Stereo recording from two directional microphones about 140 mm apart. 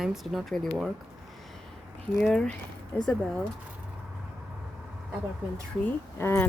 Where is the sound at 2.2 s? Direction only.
5° left (ahead or behind).